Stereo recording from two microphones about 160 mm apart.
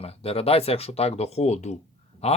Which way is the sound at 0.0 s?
40° left (ahead or behind).